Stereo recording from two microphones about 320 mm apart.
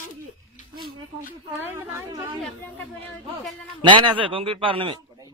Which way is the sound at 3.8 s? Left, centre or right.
Centre.